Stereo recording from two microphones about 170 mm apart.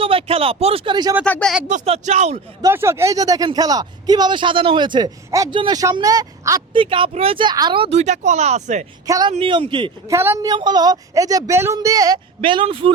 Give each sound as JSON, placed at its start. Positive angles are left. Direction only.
{"t": 0.0, "sound": "speech", "side_deg": -35}
{"t": 1.2, "sound": "speech", "side_deg": 5}
{"t": 1.6, "sound": "speech", "side_deg": -40}
{"t": 2.6, "sound": "speech", "side_deg": -15}
{"t": 6.7, "sound": "speech", "side_deg": -30}
{"t": 9.0, "sound": "speech", "side_deg": -20}
{"t": 9.3, "sound": "speech", "side_deg": -30}
{"t": 10.1, "sound": "speech", "side_deg": -15}